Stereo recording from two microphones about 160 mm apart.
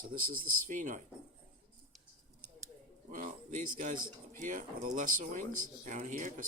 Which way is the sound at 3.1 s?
55° right (ahead or behind).